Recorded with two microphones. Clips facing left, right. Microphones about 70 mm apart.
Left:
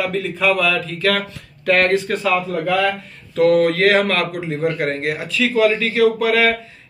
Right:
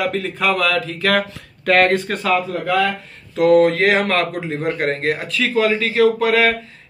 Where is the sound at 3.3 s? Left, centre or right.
Right.